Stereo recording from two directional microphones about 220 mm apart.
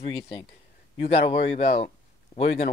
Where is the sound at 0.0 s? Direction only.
25° left (ahead or behind).